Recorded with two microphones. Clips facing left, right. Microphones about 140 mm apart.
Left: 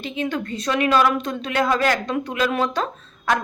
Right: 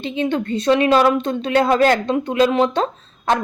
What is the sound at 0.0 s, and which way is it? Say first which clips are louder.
A woman's voice: right 5 dB; 25° right (ahead or behind).